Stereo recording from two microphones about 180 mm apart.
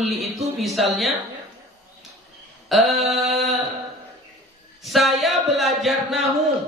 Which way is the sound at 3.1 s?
35° right (ahead or behind).